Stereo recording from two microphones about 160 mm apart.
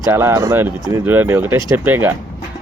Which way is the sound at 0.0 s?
15° right (ahead or behind).